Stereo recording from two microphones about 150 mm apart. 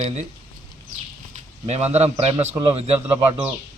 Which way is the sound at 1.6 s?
45° right (ahead or behind).